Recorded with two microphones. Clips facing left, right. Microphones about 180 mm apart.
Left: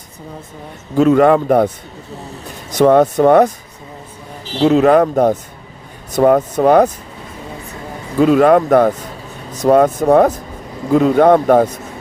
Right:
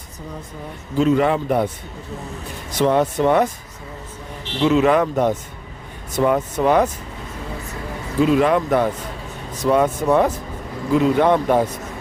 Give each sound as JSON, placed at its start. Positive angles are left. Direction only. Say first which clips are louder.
{"t": 0.9, "sound": "speech", "louder": "left 7 dB", "side_deg": 50}
{"t": 2.7, "sound": "speech", "louder": "left 7 dB", "side_deg": 45}
{"t": 4.5, "sound": "speech", "louder": "left 5 dB", "side_deg": 35}
{"t": 8.2, "sound": "speech", "louder": "left 6 dB", "side_deg": 45}